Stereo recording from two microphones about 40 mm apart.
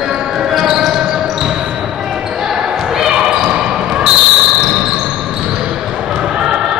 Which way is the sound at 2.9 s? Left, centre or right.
Centre.